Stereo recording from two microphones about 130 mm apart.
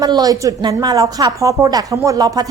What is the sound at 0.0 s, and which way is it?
A woman's voice, 30° right (ahead or behind).